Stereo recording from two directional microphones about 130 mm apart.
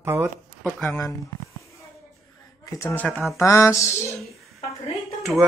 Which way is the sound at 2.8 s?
15° left (ahead or behind).